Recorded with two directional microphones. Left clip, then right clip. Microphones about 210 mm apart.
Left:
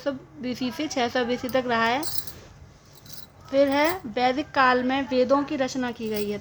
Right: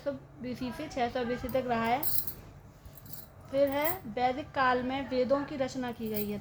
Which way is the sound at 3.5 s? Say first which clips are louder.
Left 8 dB; 45° left (ahead or behind).